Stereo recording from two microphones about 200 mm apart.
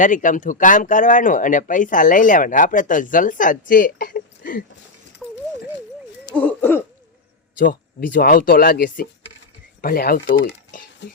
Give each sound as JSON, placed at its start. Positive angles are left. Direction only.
{"t": 0.0, "sound": "speech", "side_deg": 40}
{"t": 6.3, "sound": "cough", "side_deg": 10}
{"t": 7.6, "sound": "speech", "side_deg": 45}